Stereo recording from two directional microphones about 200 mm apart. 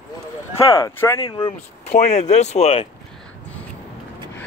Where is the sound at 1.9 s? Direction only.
35° left (ahead or behind).